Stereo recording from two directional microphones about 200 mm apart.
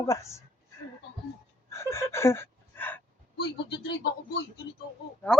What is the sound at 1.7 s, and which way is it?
Gasp, 15° left (ahead or behind).